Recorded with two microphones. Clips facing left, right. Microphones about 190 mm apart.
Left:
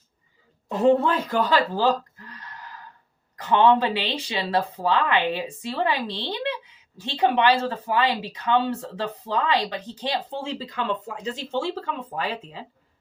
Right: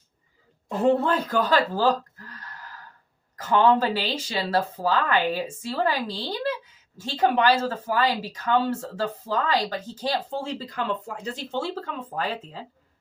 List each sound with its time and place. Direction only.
0.7 s a man's voice: 40° right (ahead or behind)
2.2 s gasp: 40° right (ahead or behind)
3.4 s a woman's voice: 40° right (ahead or behind)